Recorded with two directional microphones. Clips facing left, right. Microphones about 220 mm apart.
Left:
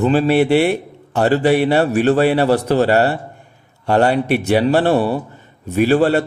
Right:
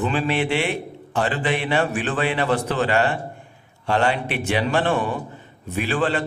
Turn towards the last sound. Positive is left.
turn(degrees=40)  # may be behind; listen again after turning